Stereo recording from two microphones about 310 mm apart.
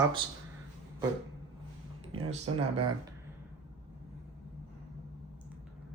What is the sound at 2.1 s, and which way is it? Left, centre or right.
Speech, centre.